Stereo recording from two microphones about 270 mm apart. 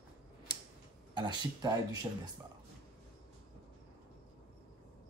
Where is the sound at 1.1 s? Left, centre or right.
Centre.